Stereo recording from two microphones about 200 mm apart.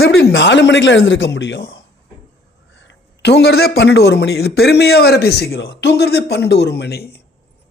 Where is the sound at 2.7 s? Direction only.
65° left (ahead or behind).